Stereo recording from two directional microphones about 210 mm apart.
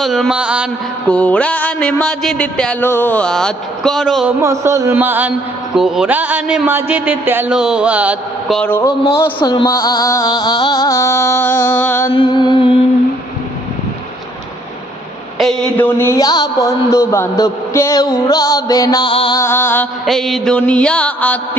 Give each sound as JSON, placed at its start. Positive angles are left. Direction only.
{"t": 0.0, "sound": "speech", "side_deg": 0}
{"t": 1.1, "sound": "speech", "side_deg": 5}
{"t": 4.3, "sound": "speech", "side_deg": -15}
{"t": 9.4, "sound": "a man's voice", "side_deg": 20}
{"t": 12.1, "sound": "music", "side_deg": 20}
{"t": 15.4, "sound": "a man's voice", "side_deg": 0}
{"t": 19.4, "sound": "a man's voice", "side_deg": 10}